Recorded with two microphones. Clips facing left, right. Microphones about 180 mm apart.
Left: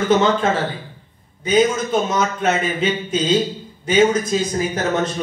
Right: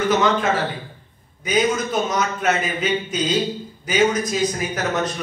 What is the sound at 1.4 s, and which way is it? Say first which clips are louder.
A man's voice: left 4 dB; 25° left (ahead or behind).